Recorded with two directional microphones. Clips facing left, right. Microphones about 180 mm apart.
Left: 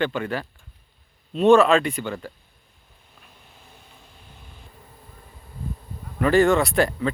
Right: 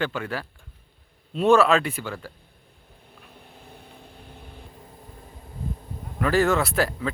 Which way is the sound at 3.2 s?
60° right (ahead or behind).